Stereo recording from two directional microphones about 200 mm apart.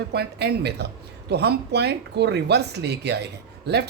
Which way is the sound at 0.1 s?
55° right (ahead or behind).